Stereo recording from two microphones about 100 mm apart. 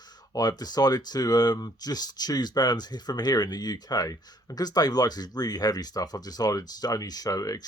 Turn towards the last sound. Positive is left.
turn(degrees=35)  # may be behind; listen again after turning